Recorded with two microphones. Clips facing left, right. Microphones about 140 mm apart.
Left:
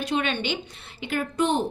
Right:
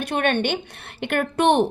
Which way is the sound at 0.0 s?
55° right (ahead or behind).